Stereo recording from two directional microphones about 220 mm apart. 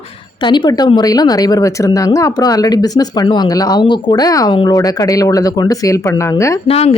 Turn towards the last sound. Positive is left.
turn(degrees=25)  # may be behind; listen again after turning